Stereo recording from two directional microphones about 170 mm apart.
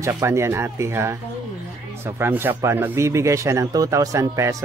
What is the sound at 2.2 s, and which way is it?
Speech, 10° right (ahead or behind).